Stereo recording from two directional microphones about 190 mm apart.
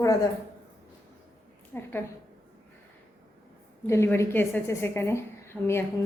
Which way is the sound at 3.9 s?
15° left (ahead or behind).